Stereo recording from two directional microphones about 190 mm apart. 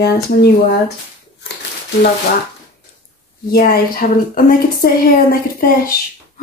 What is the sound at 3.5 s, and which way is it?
A woman's voice, 50° left (ahead or behind).